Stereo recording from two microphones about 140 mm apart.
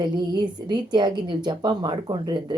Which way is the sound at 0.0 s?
30° right (ahead or behind).